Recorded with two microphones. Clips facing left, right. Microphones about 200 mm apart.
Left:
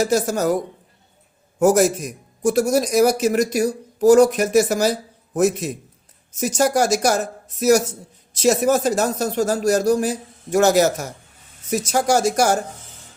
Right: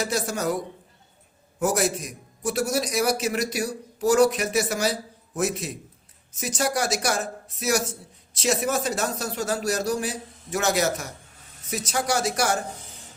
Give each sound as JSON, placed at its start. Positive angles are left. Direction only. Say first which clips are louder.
{"t": 0.0, "sound": "a man's voice", "louder": "left 7 dB", "side_deg": 45}
{"t": 6.4, "sound": "a man's voice", "louder": "left 8 dB", "side_deg": 45}
{"t": 8.4, "sound": "a man's voice", "louder": "left 8 dB", "side_deg": 40}